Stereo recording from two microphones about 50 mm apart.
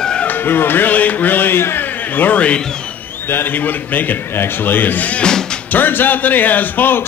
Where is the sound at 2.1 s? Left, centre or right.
Left.